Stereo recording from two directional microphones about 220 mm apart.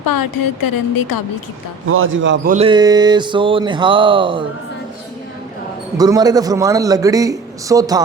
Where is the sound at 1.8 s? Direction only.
70° right (ahead or behind).